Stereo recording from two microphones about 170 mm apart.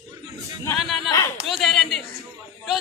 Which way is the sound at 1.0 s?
20° left (ahead or behind).